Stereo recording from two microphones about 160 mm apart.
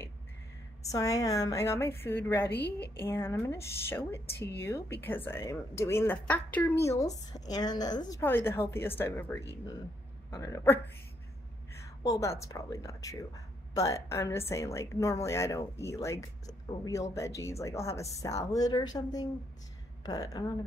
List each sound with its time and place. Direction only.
0.9 s a woman's voice: 20° left (ahead or behind)
8.2 s a woman's voice: 15° left (ahead or behind)
11.8 s a woman's voice: 20° left (ahead or behind)